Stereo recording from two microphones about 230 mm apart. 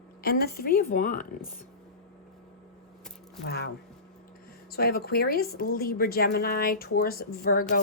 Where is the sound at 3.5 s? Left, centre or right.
Left.